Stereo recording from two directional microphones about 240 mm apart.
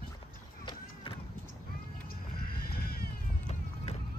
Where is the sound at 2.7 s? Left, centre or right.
Left.